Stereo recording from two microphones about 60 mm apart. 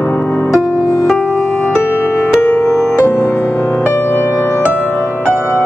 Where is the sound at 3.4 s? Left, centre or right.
Left.